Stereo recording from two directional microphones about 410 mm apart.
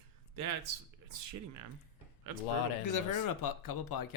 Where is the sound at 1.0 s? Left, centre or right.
Right.